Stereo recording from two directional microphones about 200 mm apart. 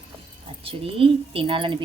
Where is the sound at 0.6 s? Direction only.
25° right (ahead or behind).